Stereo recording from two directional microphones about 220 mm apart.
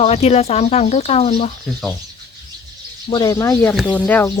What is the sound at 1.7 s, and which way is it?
Speech, 5° right (ahead or behind).